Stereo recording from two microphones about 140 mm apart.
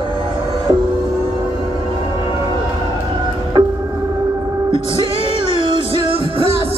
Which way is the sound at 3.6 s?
30° right (ahead or behind).